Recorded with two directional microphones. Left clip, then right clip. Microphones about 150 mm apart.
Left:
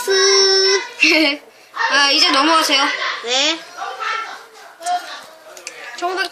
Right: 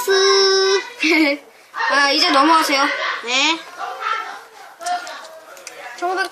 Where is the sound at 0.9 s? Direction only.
5° left (ahead or behind).